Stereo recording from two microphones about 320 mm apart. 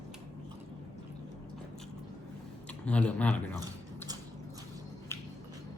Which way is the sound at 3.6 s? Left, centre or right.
Centre.